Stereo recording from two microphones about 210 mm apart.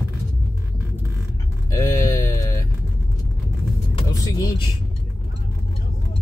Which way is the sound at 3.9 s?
15° left (ahead or behind).